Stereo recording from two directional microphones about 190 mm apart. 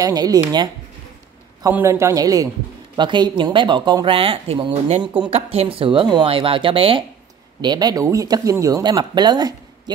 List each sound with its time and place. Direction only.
0.0 s a man's voice: 20° right (ahead or behind)